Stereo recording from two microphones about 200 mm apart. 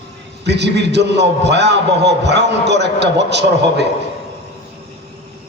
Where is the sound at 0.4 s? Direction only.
60° right (ahead or behind).